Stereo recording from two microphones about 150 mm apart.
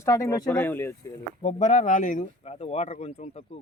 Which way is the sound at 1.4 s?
55° left (ahead or behind).